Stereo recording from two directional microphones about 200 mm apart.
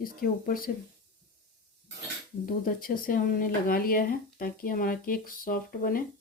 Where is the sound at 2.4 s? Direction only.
45° left (ahead or behind).